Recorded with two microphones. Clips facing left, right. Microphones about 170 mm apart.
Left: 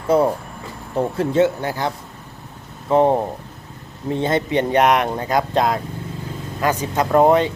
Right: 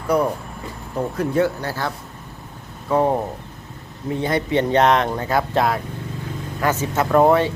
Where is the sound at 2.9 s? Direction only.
20° left (ahead or behind).